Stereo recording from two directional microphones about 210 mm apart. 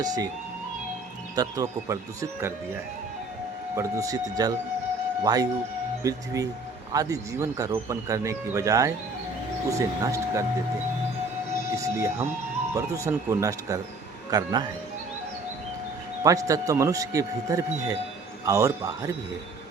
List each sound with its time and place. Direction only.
0.0 s speech: 20° right (ahead or behind)
1.4 s speech: 15° right (ahead or behind)
3.8 s speech: 15° right (ahead or behind)
11.7 s a man's voice: 15° right (ahead or behind)
16.2 s speech: 15° right (ahead or behind)